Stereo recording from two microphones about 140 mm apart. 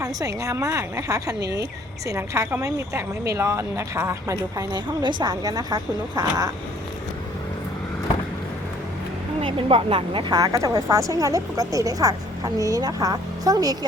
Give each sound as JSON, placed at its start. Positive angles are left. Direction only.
{"t": 0.0, "sound": "speech", "side_deg": -25}
{"t": 9.4, "sound": "speech", "side_deg": -40}